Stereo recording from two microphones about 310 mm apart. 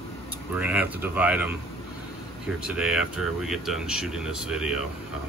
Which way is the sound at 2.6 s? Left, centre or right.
Centre.